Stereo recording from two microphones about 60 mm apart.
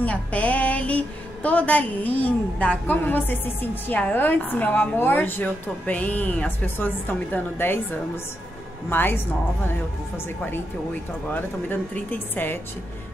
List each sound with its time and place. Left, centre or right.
0.0 s a woman's voice: left
8.9 s a woman's voice: left
11.2 s a woman's voice: left